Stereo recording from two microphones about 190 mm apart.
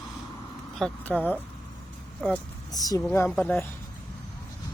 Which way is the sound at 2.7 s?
20° left (ahead or behind).